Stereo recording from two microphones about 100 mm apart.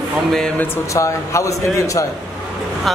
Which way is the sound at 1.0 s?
30° left (ahead or behind).